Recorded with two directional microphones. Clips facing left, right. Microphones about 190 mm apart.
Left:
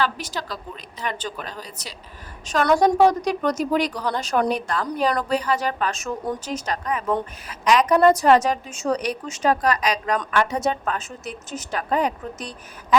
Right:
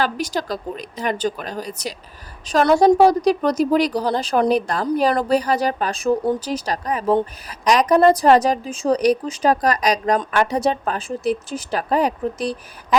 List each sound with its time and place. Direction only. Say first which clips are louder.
0.0 s a woman's voice: right 4 dB; 40° right (ahead or behind)
2.5 s a woman's voice: right 4 dB; 30° right (ahead or behind)